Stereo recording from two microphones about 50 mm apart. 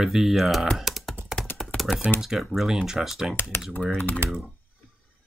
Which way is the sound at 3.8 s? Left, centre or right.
Left.